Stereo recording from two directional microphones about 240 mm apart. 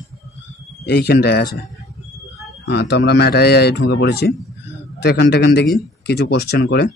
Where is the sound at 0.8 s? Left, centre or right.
Left.